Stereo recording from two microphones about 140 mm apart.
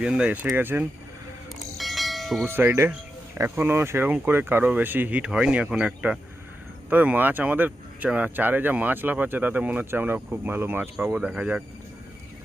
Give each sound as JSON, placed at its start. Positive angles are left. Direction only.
{"t": 0.0, "sound": "speech", "side_deg": -5}
{"t": 1.8, "sound": "train", "side_deg": 0}
{"t": 2.5, "sound": "speech", "side_deg": -15}